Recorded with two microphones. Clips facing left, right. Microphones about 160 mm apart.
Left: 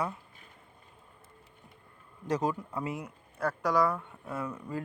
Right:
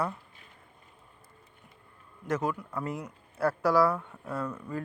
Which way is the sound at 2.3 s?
35° left (ahead or behind).